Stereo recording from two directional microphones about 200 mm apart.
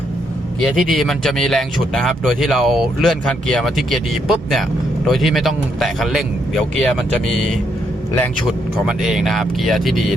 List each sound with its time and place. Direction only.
0.6 s speech: centre (ahead or behind)